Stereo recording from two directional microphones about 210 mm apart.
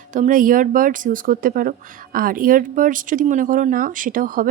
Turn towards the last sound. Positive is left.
turn(degrees=-40)  # may be behind; listen again after turning